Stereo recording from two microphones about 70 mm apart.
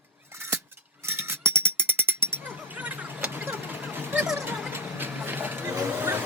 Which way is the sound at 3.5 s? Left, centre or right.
Right.